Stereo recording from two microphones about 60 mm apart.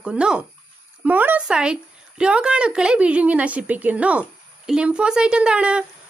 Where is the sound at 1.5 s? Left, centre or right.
Centre.